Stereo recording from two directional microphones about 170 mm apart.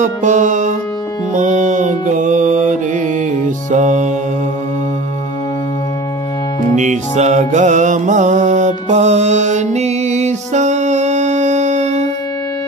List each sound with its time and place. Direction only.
0.0 s music: 45° right (ahead or behind)
6.7 s music: 45° right (ahead or behind)